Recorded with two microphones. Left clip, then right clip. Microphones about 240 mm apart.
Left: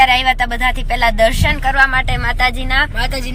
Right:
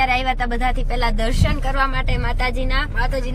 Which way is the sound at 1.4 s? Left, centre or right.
Centre.